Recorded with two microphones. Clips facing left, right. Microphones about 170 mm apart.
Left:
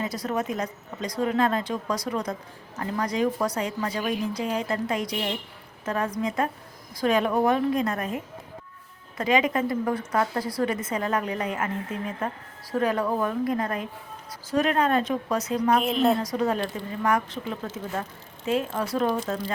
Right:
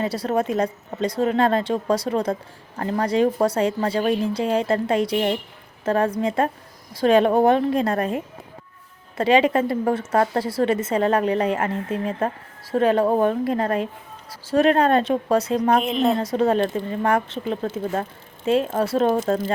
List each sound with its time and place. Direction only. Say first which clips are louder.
0.0 s speech: right 6 dB; 30° right (ahead or behind)
15.8 s a woman's voice: right 2 dB; centre (ahead or behind)
16.1 s speech: right 6 dB; 25° right (ahead or behind)